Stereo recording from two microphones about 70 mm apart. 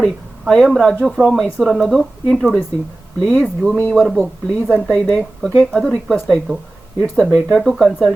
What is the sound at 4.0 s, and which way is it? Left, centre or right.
Speech, centre.